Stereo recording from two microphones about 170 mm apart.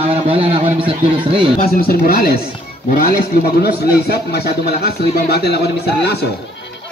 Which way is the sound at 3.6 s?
70° left (ahead or behind).